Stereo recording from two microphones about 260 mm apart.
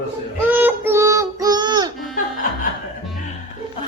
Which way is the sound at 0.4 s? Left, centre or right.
Centre.